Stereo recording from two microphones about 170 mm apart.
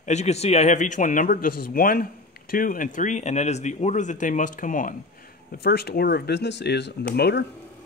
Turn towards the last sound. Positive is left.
turn(degrees=75)  # may be behind; listen again after turning